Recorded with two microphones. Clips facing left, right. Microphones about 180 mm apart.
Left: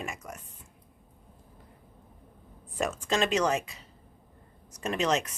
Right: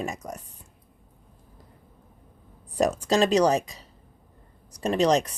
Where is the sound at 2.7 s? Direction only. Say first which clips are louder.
Right 7 dB; 40° right (ahead or behind).